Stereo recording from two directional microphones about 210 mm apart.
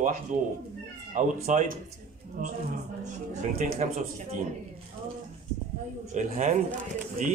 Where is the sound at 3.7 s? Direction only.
35° right (ahead or behind).